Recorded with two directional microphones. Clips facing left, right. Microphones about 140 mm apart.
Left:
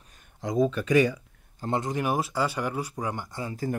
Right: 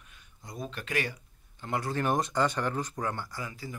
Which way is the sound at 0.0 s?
40° left (ahead or behind).